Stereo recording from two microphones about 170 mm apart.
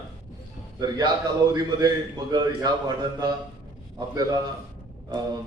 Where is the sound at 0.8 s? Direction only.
25° right (ahead or behind).